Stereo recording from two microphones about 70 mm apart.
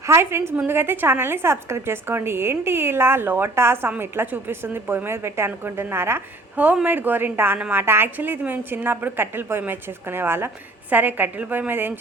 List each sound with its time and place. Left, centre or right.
0.0 s a woman's voice: right